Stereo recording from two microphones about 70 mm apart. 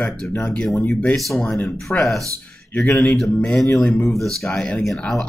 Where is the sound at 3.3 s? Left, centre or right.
Centre.